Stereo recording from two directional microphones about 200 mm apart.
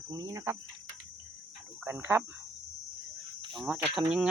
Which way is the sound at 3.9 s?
5° right (ahead or behind).